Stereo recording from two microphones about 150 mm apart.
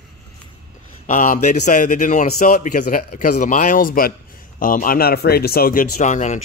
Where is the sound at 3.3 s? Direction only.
55° left (ahead or behind).